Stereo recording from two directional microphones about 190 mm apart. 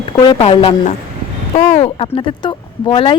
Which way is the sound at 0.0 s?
25° left (ahead or behind).